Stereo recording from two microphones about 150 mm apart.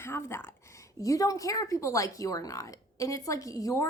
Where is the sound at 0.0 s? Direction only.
15° left (ahead or behind).